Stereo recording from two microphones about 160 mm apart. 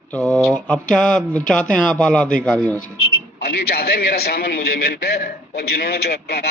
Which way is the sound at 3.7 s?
75° left (ahead or behind).